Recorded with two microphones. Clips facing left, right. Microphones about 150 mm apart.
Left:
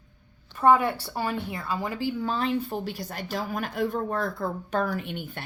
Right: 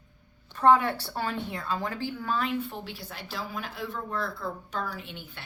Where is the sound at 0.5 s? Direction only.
10° left (ahead or behind).